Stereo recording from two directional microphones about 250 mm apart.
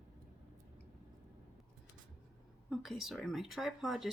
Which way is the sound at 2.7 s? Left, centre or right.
Centre.